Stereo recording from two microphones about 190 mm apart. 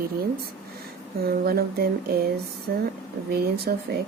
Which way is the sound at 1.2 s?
50° right (ahead or behind).